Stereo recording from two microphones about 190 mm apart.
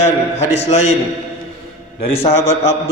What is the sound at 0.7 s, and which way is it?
Speech, 35° left (ahead or behind).